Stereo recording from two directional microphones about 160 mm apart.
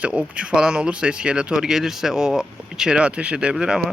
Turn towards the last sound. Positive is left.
turn(degrees=-5)  # may be behind; listen again after turning